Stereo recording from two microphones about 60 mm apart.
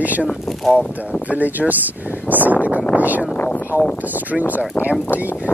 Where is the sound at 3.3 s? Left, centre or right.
Left.